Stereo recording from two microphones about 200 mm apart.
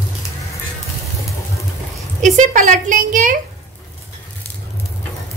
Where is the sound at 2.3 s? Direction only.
40° right (ahead or behind).